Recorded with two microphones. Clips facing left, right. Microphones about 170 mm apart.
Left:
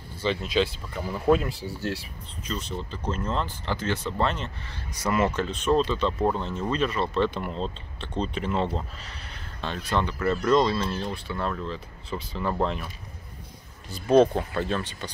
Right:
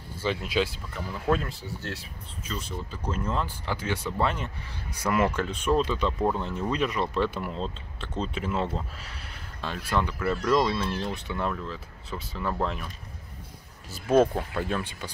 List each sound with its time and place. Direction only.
0.2 s speech: 10° right (ahead or behind)
0.9 s speech: 10° left (ahead or behind)
2.4 s speech: 5° right (ahead or behind)
11.5 s speech: 5° right (ahead or behind)